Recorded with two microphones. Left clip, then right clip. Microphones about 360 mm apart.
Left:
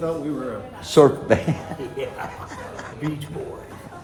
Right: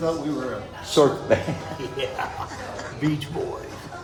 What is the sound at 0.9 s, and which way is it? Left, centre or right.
Speech, left.